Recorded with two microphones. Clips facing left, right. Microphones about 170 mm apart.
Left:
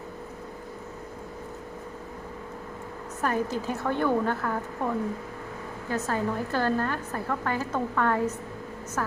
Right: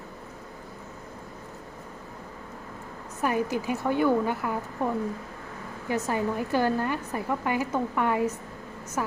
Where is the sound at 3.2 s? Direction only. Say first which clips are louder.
Right 1 dB; 10° right (ahead or behind).